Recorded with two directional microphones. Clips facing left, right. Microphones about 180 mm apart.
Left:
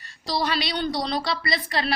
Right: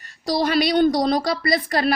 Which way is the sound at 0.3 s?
50° right (ahead or behind).